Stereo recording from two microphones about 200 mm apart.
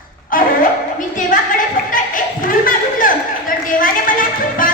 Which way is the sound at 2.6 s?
45° left (ahead or behind).